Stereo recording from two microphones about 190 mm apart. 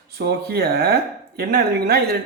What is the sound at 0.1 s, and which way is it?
A man's voice, 55° right (ahead or behind).